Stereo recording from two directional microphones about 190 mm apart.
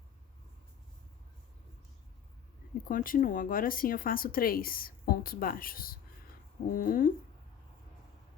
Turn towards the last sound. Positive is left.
turn(degrees=45)  # may be behind; listen again after turning